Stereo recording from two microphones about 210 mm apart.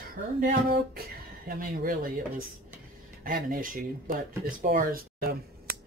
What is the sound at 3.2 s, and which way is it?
Speech, 40° right (ahead or behind).